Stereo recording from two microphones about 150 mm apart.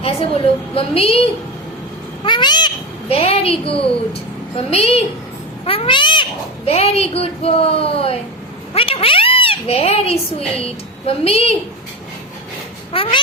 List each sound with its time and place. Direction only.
0.0 s speech: 40° left (ahead or behind)
2.2 s a child's voice: 30° left (ahead or behind)
8.7 s cat: 40° left (ahead or behind)
10.6 s speech: 40° left (ahead or behind)
12.9 s speech: 35° left (ahead or behind)